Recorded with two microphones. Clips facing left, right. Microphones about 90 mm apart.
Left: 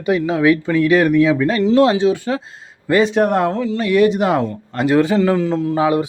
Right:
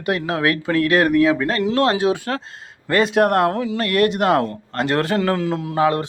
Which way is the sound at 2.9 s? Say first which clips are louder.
Left 2 dB; centre (ahead or behind).